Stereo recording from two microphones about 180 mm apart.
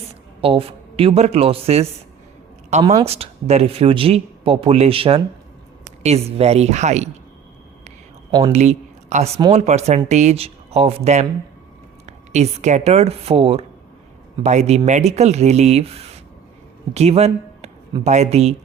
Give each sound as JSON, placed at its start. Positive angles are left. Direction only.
{"t": 0.4, "sound": "speech", "side_deg": -30}
{"t": 2.8, "sound": "speech", "side_deg": -20}
{"t": 3.1, "sound": "speech", "side_deg": -35}
{"t": 8.5, "sound": "speech", "side_deg": -40}